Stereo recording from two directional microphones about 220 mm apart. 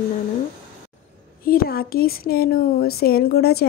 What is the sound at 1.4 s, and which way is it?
A woman's voice, 45° left (ahead or behind).